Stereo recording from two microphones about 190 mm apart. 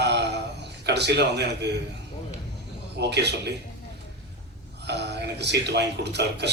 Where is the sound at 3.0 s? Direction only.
60° right (ahead or behind).